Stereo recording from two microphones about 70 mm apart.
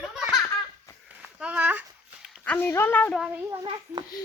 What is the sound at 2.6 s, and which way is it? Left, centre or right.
Speech, left.